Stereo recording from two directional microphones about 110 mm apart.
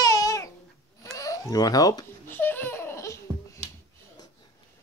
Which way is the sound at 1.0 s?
30° left (ahead or behind).